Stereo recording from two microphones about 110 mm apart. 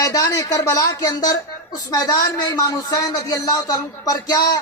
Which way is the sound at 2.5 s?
30° left (ahead or behind).